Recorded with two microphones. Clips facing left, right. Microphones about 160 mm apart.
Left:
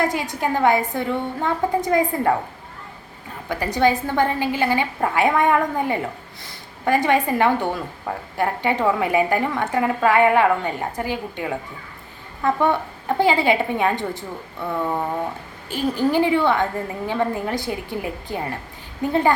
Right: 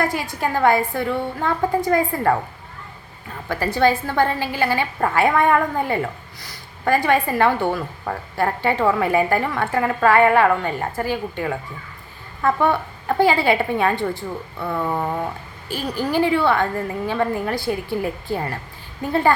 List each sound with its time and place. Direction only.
0.0 s a woman's voice: 20° left (ahead or behind)
3.5 s a woman's voice: 15° left (ahead or behind)